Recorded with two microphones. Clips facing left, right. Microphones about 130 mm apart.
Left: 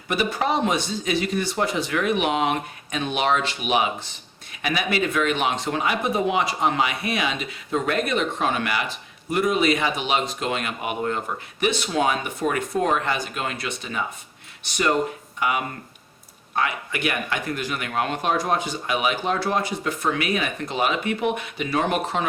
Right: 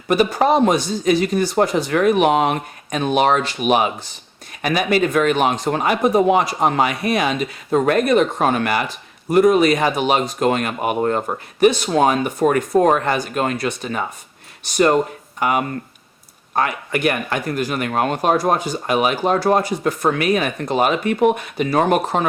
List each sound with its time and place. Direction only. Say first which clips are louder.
0.1 s speech: right 8 dB; 40° right (ahead or behind)